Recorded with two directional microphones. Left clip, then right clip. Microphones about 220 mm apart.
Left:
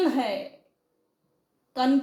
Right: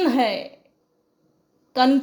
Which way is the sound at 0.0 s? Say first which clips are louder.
Right 5 dB; 40° right (ahead or behind).